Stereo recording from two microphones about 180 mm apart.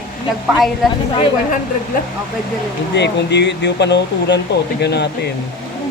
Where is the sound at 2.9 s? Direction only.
75° left (ahead or behind).